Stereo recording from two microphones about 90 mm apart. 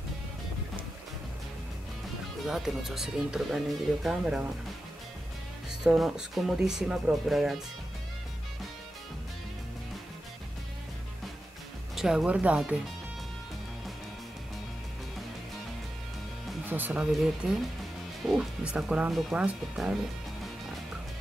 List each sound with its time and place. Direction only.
2.4 s speech: centre (ahead or behind)
5.7 s speech: 5° right (ahead or behind)
11.9 s speech: 5° right (ahead or behind)
16.6 s speech: 20° right (ahead or behind)
17.2 s speech: 5° right (ahead or behind)